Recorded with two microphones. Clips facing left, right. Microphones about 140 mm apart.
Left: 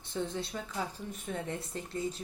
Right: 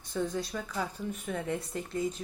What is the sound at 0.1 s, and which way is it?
A woman's voice, 25° left (ahead or behind).